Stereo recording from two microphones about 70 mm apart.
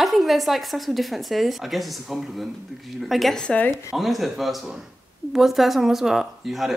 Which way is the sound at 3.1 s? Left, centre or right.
Centre.